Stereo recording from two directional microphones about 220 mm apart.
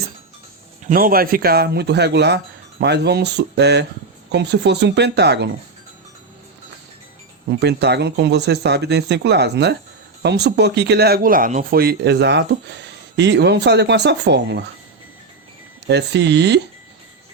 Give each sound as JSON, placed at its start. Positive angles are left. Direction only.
{"t": 0.9, "sound": "speech", "side_deg": -40}
{"t": 7.6, "sound": "speech", "side_deg": -50}
{"t": 15.9, "sound": "speech", "side_deg": -50}